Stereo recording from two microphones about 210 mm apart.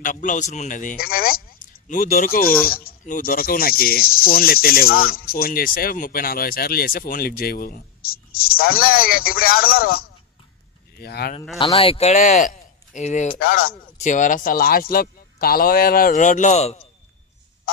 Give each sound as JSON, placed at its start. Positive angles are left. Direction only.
{"t": 0.0, "sound": "a man's voice", "side_deg": 40}
{"t": 11.0, "sound": "speech", "side_deg": 50}
{"t": 11.5, "sound": "a man's voice", "side_deg": 25}